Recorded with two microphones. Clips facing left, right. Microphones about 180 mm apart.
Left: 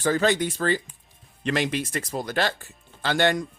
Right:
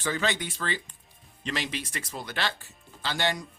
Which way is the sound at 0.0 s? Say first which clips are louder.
Left 8 dB; 40° left (ahead or behind).